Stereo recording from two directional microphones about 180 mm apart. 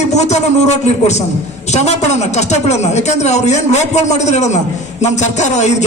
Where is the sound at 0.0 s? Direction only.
40° left (ahead or behind).